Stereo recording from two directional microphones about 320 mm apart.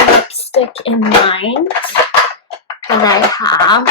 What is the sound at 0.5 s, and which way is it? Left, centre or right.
Speech, centre.